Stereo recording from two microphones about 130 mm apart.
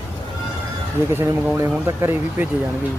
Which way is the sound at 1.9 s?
20° right (ahead or behind).